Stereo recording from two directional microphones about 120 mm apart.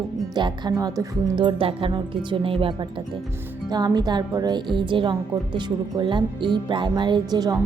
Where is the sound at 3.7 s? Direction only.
35° right (ahead or behind).